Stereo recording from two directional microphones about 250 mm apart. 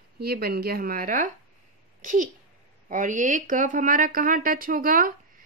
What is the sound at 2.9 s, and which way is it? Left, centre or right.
Speech, right.